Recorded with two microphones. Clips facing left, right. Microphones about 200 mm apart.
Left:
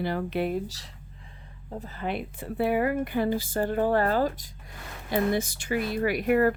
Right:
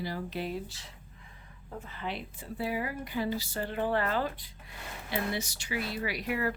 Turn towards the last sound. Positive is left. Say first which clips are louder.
# left 10 dB
turn(degrees=50)  # may be behind; listen again after turning